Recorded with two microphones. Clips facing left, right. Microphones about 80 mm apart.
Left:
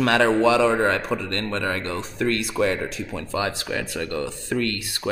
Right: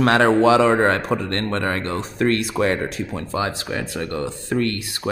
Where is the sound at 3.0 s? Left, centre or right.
Right.